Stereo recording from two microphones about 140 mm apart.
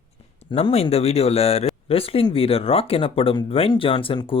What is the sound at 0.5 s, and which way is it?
Speech, 45° left (ahead or behind).